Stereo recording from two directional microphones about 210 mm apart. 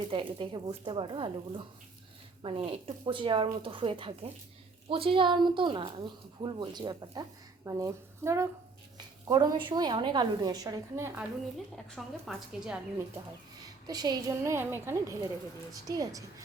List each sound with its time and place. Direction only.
0.1 s a woman's voice: 25° right (ahead or behind)
11.9 s a woman's voice: centre (ahead or behind)
13.8 s a woman's voice: 20° right (ahead or behind)